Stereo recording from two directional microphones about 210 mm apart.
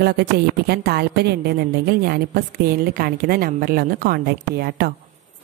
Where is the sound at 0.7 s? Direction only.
50° right (ahead or behind).